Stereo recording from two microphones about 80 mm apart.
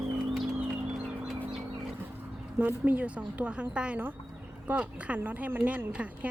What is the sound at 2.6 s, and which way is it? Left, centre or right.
A woman's voice, centre.